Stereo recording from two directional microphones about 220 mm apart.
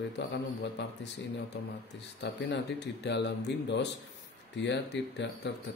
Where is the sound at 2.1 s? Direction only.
50° left (ahead or behind).